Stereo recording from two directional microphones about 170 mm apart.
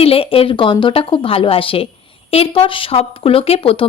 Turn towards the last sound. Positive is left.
turn(degrees=30)  # may be behind; listen again after turning